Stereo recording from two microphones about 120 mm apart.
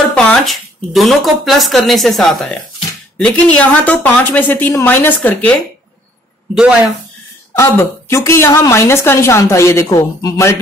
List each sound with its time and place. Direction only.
0.1 s a woman's voice: 10° left (ahead or behind)
7.5 s a woman's voice: 20° left (ahead or behind)